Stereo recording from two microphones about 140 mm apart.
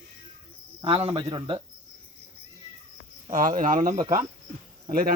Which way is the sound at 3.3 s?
70° right (ahead or behind).